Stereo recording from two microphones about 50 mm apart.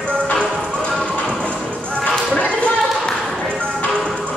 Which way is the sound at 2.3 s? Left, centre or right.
Left.